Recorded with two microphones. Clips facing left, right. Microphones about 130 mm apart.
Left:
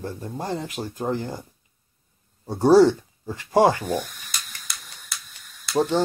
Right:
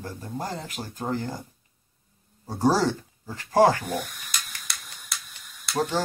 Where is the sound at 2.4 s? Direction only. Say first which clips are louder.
Left 8 dB; 20° left (ahead or behind).